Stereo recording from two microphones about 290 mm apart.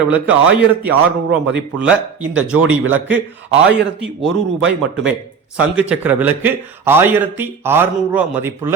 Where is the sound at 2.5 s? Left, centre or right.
Right.